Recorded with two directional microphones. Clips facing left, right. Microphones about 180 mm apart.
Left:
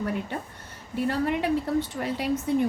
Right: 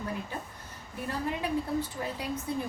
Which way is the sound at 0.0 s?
70° left (ahead or behind).